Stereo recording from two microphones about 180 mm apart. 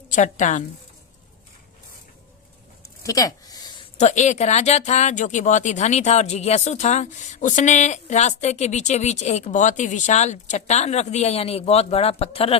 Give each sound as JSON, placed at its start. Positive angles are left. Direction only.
{"t": 0.1, "sound": "a woman's voice", "side_deg": 45}
{"t": 3.0, "sound": "a sound", "side_deg": 20}
{"t": 3.9, "sound": "speech", "side_deg": 40}